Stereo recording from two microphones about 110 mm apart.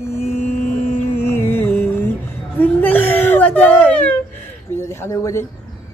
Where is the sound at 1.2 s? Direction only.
20° left (ahead or behind).